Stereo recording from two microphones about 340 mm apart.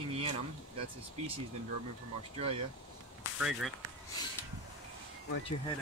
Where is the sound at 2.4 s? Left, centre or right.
Centre.